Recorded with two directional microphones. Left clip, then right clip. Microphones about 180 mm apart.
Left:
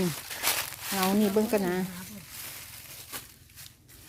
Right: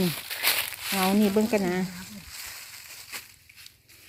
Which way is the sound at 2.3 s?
60° left (ahead or behind).